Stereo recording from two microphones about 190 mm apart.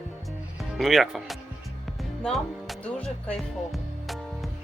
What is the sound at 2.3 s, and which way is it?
Music, centre (ahead or behind).